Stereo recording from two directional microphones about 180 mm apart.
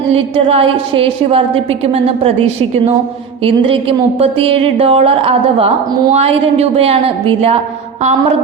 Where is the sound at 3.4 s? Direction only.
30° right (ahead or behind).